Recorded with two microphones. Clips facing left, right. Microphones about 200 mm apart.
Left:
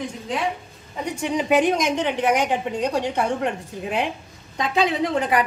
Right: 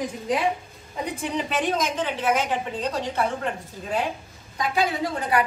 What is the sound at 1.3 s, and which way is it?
A woman's voice, 15° left (ahead or behind).